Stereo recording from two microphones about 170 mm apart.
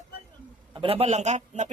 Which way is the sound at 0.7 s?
30° right (ahead or behind).